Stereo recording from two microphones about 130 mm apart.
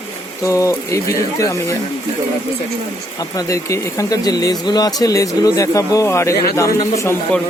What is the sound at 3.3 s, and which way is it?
Speech, 25° left (ahead or behind).